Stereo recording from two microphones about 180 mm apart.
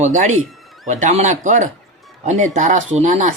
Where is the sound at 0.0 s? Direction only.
40° right (ahead or behind).